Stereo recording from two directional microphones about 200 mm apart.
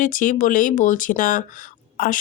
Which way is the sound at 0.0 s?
40° left (ahead or behind).